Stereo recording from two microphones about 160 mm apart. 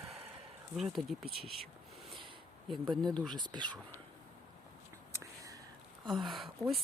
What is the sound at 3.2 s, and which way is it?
Speech, 30° right (ahead or behind).